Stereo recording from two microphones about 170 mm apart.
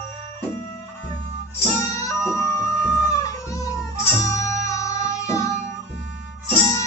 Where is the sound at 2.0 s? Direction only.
20° left (ahead or behind).